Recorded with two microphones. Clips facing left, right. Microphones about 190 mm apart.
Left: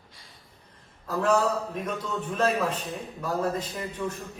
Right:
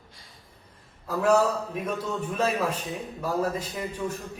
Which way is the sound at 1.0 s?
10° right (ahead or behind).